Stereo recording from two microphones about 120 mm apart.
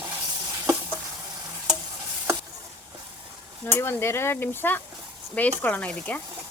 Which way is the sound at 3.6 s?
20° left (ahead or behind).